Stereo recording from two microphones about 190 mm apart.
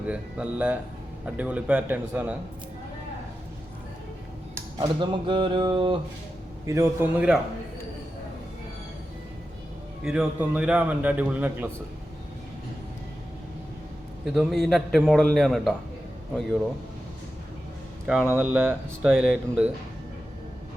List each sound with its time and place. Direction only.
0.1 s a man's voice: 5° right (ahead or behind)
4.8 s speech: 25° right (ahead or behind)
6.7 s a man's voice: 15° right (ahead or behind)
10.0 s a man's voice: 5° right (ahead or behind)
14.3 s a man's voice: centre (ahead or behind)
18.0 s a man's voice: 5° right (ahead or behind)